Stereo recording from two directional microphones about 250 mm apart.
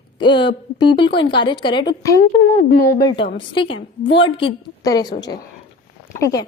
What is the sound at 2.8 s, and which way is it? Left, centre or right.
A woman's voice, centre.